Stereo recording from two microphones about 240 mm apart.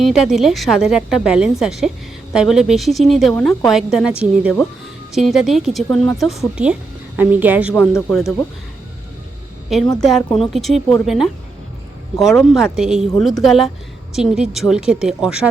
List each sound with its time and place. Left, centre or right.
0.0 s a woman's voice: centre
7.7 s speech: centre
9.6 s a woman's voice: centre
12.4 s a woman's voice: centre